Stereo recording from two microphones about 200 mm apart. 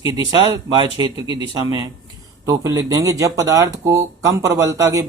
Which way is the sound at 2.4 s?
15° right (ahead or behind).